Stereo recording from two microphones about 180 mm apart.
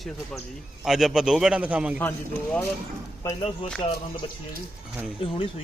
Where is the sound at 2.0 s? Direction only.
10° left (ahead or behind).